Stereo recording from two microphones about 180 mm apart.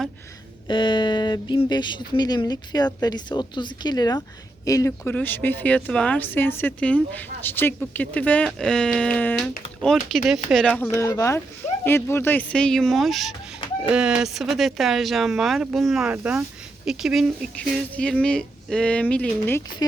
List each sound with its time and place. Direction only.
0.7 s speech: 25° left (ahead or behind); by 10.8 s 5° left (ahead or behind)
10.9 s speech: 15° left (ahead or behind)